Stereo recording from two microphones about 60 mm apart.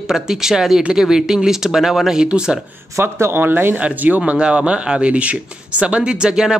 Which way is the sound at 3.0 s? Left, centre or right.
Right.